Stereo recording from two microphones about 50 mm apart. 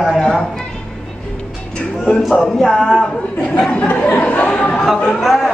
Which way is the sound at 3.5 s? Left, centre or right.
Left.